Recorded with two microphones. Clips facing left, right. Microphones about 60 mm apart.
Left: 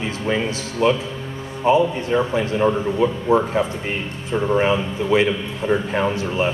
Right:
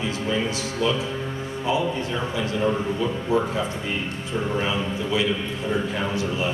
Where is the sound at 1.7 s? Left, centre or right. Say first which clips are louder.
Left 8 dB; left.